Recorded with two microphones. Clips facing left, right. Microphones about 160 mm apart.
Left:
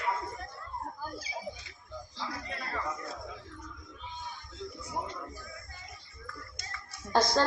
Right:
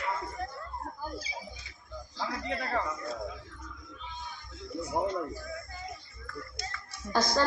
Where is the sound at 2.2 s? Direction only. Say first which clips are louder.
Right 6 dB; 70° right (ahead or behind).